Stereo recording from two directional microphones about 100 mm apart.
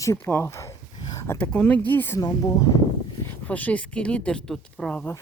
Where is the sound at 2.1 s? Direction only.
35° left (ahead or behind).